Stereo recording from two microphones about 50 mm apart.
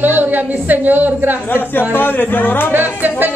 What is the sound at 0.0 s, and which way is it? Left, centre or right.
A woman's voice, right.